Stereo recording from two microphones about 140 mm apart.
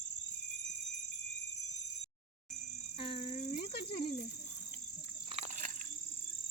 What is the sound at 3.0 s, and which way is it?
Cricket, 40° left (ahead or behind).